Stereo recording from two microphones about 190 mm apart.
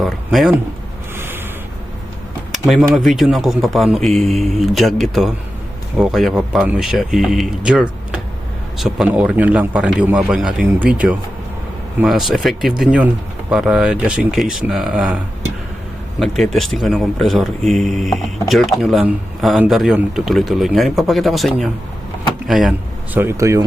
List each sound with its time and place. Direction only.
0.0 s speech: centre (ahead or behind)
1.1 s a sound: 10° right (ahead or behind)
2.5 s a sound: centre (ahead or behind)
2.9 s a man's voice: centre (ahead or behind)
16.2 s a man's voice: centre (ahead or behind)
23.1 s speech: 15° right (ahead or behind)